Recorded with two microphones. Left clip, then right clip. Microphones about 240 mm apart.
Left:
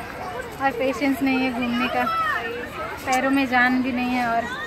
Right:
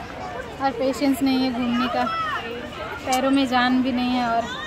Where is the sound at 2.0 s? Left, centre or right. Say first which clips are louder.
Left 2 dB; right.